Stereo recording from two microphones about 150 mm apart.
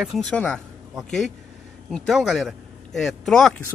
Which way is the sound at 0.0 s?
5° left (ahead or behind).